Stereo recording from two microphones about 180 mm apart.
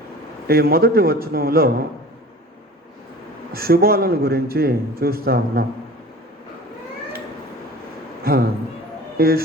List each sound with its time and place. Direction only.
0.4 s a man's voice: 60° right (ahead or behind)
3.5 s a man's voice: 55° right (ahead or behind)
8.2 s speech: 55° right (ahead or behind)